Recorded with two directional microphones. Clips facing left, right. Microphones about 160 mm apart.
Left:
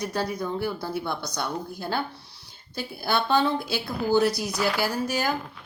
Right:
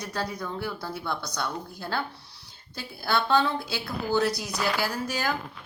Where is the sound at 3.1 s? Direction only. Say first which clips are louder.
Left 1 dB; 15° left (ahead or behind).